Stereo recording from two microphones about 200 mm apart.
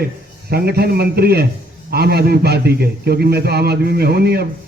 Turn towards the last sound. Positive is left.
turn(degrees=-50)  # may be behind; listen again after turning